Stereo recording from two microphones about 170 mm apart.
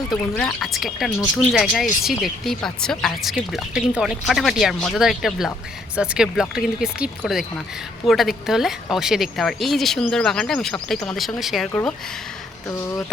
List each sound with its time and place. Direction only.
0.3 s speech: centre (ahead or behind)
11.7 s speech: 10° left (ahead or behind)